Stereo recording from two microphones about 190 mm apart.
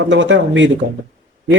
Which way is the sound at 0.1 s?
75° right (ahead or behind).